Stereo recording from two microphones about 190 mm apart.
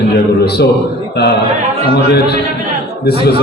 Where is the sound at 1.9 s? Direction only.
60° left (ahead or behind).